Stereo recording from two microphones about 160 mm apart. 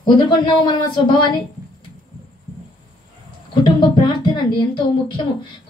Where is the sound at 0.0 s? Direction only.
30° left (ahead or behind).